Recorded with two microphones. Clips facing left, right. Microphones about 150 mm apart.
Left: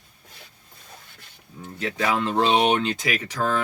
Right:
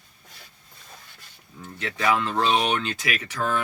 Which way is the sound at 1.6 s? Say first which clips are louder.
Right 1 dB; 25° left (ahead or behind).